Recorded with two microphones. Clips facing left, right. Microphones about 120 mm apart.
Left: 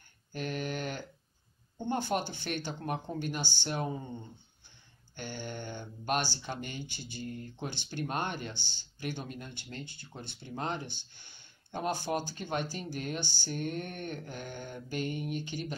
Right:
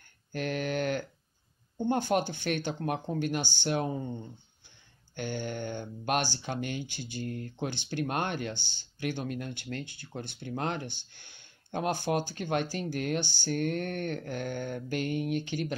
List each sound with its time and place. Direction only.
0.3 s a sound: 60° right (ahead or behind)
1.9 s speech: 50° right (ahead or behind)
5.1 s speech: 55° right (ahead or behind)